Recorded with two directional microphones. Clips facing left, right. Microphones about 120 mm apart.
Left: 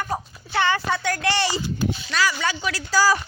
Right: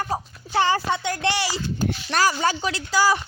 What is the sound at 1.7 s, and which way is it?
Speech, 45° right (ahead or behind).